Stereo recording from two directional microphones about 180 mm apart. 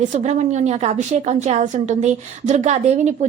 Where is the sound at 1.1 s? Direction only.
40° right (ahead or behind).